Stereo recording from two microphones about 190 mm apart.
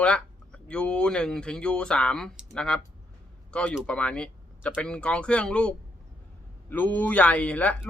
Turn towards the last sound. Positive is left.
turn(degrees=5)  # may be behind; listen again after turning